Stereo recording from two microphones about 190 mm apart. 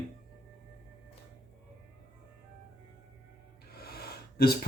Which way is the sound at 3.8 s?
55° left (ahead or behind).